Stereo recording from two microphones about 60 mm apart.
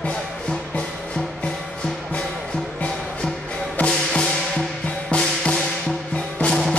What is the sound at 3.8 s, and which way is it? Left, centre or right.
Music, centre.